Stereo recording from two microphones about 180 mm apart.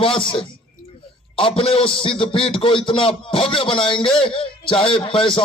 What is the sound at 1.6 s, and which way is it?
A man's voice, 30° left (ahead or behind).